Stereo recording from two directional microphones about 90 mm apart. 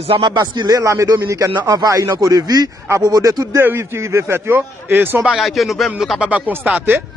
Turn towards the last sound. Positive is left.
turn(degrees=-20)  # may be behind; listen again after turning